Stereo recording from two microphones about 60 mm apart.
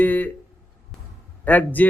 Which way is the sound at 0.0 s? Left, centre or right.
Left.